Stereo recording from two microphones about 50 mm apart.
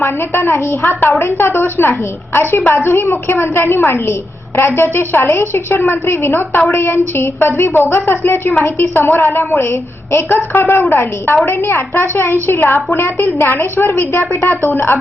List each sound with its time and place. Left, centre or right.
0.0 s a woman's voice: left
9.6 s a woman's voice: left